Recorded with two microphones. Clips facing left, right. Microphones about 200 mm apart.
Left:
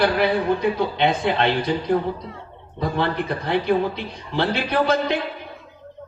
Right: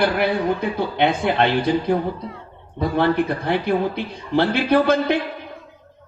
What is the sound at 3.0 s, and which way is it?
A man's voice, 55° right (ahead or behind).